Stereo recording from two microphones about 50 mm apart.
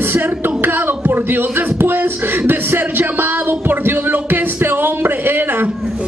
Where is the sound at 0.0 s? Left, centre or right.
Right.